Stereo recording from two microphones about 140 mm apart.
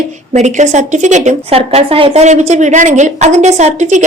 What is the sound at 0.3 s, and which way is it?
A woman's voice, 55° right (ahead or behind).